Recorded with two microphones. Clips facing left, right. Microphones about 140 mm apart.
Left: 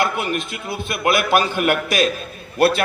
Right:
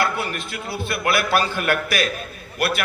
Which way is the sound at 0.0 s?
20° left (ahead or behind).